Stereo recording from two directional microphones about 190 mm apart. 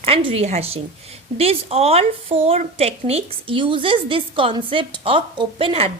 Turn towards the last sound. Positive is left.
turn(degrees=-30)  # may be behind; listen again after turning